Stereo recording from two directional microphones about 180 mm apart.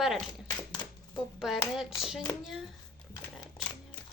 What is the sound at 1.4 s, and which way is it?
Speech, centre (ahead or behind).